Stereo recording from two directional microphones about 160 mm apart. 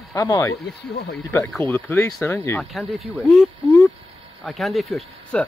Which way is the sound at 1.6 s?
15° left (ahead or behind).